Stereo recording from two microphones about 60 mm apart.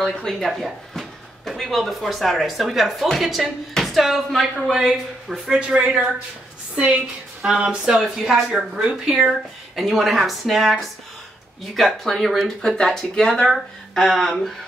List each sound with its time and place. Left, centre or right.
0.0 s speech: centre
5.5 s a woman's voice: centre